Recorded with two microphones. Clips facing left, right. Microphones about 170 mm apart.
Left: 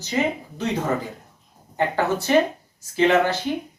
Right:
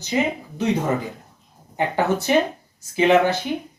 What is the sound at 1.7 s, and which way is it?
Speech, 15° right (ahead or behind).